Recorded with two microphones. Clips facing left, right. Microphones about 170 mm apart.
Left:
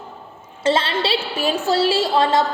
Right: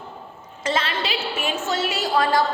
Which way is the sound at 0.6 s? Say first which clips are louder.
Left 6 dB; 30° left (ahead or behind).